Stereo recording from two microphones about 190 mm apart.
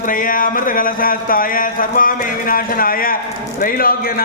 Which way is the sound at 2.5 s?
50° left (ahead or behind).